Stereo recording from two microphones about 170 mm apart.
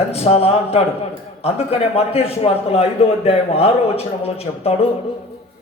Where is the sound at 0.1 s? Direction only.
35° left (ahead or behind).